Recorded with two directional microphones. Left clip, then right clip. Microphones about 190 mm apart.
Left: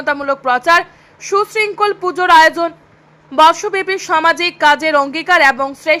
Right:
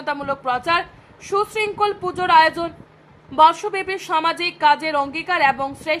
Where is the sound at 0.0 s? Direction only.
20° left (ahead or behind).